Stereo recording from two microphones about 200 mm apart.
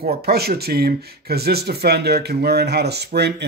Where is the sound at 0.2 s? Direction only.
50° right (ahead or behind).